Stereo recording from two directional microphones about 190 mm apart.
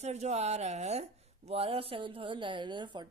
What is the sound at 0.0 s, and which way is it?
A woman's voice, 35° right (ahead or behind).